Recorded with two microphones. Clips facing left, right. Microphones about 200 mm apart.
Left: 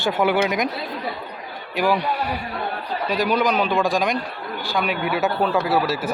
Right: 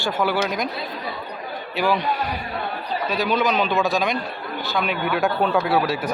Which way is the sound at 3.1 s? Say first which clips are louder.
Left 1 dB; 15° left (ahead or behind).